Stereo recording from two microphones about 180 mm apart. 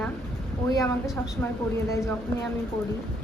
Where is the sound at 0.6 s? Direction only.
20° left (ahead or behind).